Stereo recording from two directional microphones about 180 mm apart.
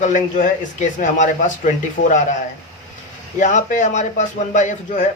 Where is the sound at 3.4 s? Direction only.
45° left (ahead or behind).